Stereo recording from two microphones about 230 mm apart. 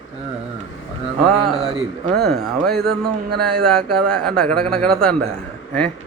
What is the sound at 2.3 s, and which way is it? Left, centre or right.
Speech, right.